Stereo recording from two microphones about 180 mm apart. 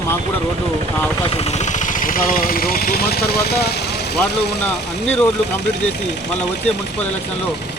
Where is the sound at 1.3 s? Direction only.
35° left (ahead or behind); by 3.8 s 60° left (ahead or behind).